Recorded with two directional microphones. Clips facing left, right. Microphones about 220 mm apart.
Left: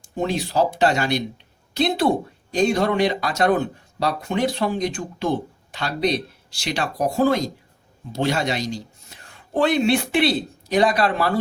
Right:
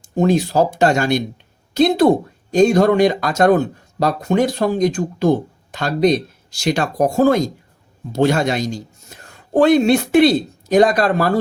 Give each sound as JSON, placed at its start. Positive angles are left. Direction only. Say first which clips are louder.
{"t": 0.2, "sound": "speech", "louder": "right 6 dB", "side_deg": -45}